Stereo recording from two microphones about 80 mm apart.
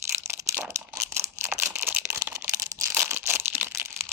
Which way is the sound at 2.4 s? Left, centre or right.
Right.